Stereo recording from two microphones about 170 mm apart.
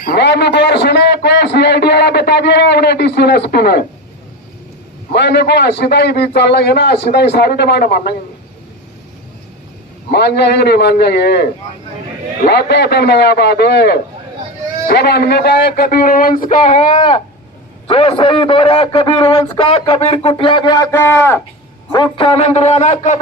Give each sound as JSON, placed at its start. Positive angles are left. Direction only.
{"t": 0.0, "sound": "a man's voice", "side_deg": 75}
{"t": 5.1, "sound": "a man's voice", "side_deg": 75}
{"t": 10.1, "sound": "a man's voice", "side_deg": 75}
{"t": 12.5, "sound": "a man's voice", "side_deg": 75}
{"t": 16.6, "sound": "a man's voice", "side_deg": 35}
{"t": 21.9, "sound": "a man's voice", "side_deg": 30}